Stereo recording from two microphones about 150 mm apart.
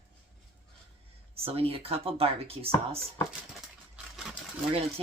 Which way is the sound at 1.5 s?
40° right (ahead or behind).